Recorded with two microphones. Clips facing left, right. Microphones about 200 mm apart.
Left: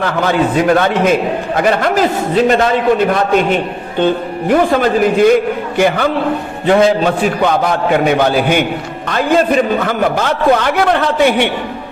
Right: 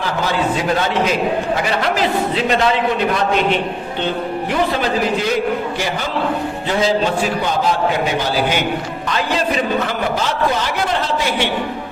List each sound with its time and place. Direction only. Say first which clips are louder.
0.0 s a man's voice: left 5 dB; 55° left (ahead or behind)